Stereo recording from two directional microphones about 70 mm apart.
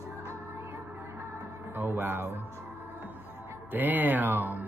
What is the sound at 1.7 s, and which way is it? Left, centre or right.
Speech, right.